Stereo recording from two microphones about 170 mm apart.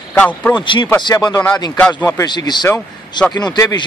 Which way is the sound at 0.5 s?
25° left (ahead or behind).